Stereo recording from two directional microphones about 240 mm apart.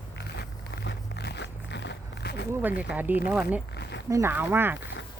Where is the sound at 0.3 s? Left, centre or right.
Left.